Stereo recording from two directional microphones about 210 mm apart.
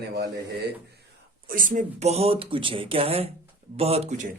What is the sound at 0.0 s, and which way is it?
Speech, 50° right (ahead or behind).